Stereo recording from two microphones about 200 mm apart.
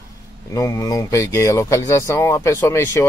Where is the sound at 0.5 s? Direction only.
15° left (ahead or behind).